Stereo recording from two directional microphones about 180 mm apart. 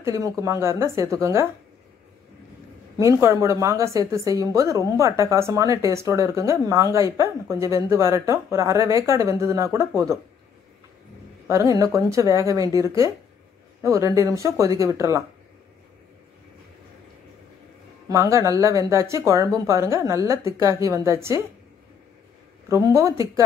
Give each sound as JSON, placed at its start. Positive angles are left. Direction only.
{"t": 0.0, "sound": "a woman's voice", "side_deg": -15}
{"t": 3.0, "sound": "a woman's voice", "side_deg": -15}
{"t": 11.4, "sound": "a woman's voice", "side_deg": -15}
{"t": 13.8, "sound": "a woman's voice", "side_deg": -15}
{"t": 18.0, "sound": "a woman's voice", "side_deg": -15}
{"t": 22.7, "sound": "a woman's voice", "side_deg": -15}